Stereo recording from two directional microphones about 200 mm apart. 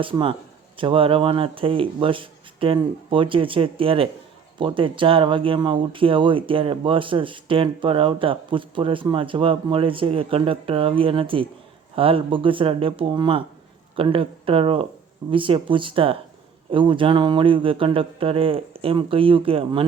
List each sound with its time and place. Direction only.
0.0 s speech: 25° right (ahead or behind)